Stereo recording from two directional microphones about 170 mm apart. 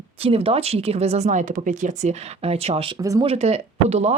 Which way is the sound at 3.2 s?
40° right (ahead or behind).